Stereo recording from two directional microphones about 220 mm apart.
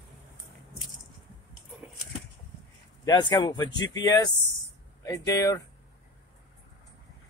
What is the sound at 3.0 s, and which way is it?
Speech, 20° left (ahead or behind).